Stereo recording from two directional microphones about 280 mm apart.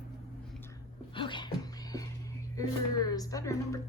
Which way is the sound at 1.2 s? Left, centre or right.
Centre.